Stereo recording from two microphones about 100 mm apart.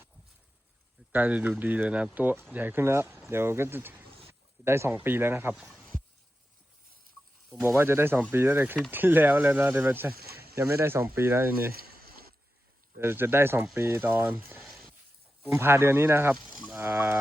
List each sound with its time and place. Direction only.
1.1 s speech: 15° right (ahead or behind)
5.5 s speech: centre (ahead or behind)
7.6 s speech: 25° right (ahead or behind)
13.0 s speech: 25° right (ahead or behind)
14.6 s a sound: centre (ahead or behind)
15.5 s speech: 25° right (ahead or behind)